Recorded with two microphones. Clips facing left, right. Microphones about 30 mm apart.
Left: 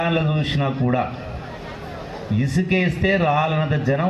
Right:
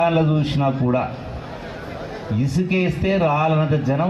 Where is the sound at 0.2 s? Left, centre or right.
Left.